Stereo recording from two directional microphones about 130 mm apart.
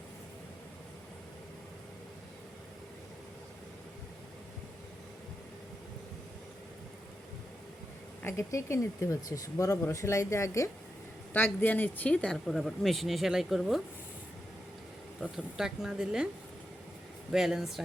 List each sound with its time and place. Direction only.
8.2 s speech: 20° left (ahead or behind); by 13.8 s centre (ahead or behind)
15.2 s speech: 5° right (ahead or behind)
17.3 s speech: 5° right (ahead or behind)